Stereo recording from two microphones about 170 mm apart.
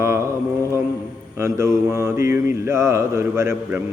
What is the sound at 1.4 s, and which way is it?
Mantra, 15° right (ahead or behind).